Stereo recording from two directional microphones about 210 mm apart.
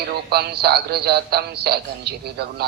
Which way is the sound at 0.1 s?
50° right (ahead or behind).